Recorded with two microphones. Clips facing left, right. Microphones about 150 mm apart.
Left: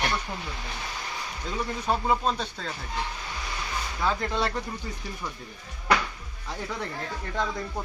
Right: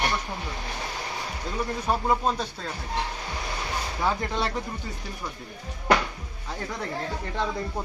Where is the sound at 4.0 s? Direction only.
15° right (ahead or behind).